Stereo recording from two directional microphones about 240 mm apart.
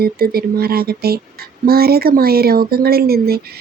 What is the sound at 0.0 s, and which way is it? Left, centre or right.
Speech, right.